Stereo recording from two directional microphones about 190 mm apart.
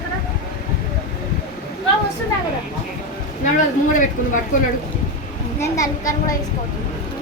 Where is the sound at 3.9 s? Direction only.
45° left (ahead or behind).